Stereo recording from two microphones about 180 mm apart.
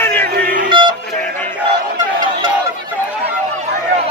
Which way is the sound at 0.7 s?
25° right (ahead or behind).